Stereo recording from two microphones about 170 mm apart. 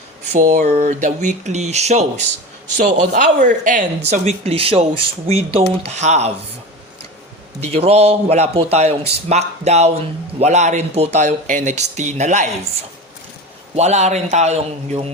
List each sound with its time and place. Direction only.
0.3 s speech: 45° right (ahead or behind)
7.6 s speech: 35° right (ahead or behind)
13.7 s speech: 40° right (ahead or behind)